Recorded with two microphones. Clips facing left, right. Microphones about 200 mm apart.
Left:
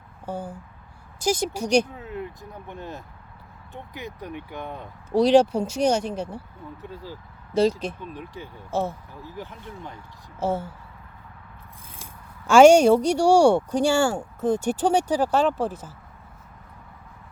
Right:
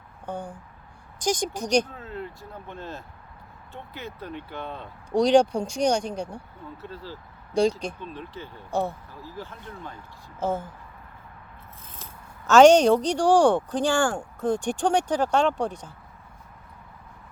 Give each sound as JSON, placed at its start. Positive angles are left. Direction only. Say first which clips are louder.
{"t": 0.3, "sound": "speech", "louder": "left 2 dB", "side_deg": 5}
{"t": 8.7, "sound": "speech", "louder": "left 1 dB", "side_deg": 0}
{"t": 9.2, "sound": "speech", "louder": "left 1 dB", "side_deg": 20}
{"t": 12.5, "sound": "speech", "louder": "left 2 dB", "side_deg": 10}